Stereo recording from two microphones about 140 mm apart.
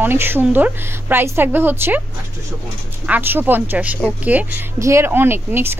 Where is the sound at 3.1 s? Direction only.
15° right (ahead or behind).